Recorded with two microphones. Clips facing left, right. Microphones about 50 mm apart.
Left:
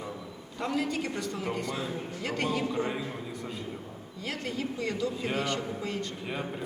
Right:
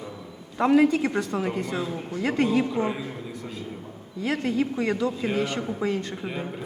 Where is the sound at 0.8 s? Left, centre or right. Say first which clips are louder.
Right 10 dB; right.